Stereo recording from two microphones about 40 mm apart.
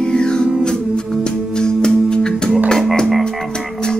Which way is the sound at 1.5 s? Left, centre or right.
Centre.